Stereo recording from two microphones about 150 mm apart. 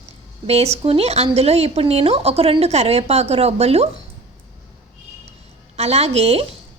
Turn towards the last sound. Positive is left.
turn(degrees=-40)  # may be behind; listen again after turning